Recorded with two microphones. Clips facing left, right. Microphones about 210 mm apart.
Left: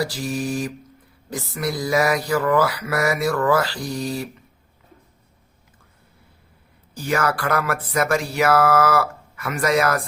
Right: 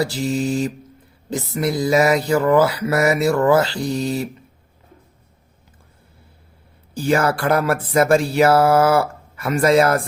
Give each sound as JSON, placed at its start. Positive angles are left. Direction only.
{"t": 0.0, "sound": "speech", "side_deg": -25}
{"t": 6.9, "sound": "speech", "side_deg": -30}